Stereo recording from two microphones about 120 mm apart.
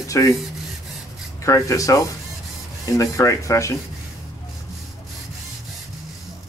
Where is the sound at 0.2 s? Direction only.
25° left (ahead or behind).